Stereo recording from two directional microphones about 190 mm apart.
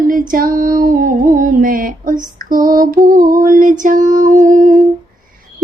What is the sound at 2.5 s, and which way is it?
Lullaby, 45° right (ahead or behind).